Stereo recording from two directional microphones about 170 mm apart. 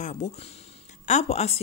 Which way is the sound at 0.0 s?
45° left (ahead or behind).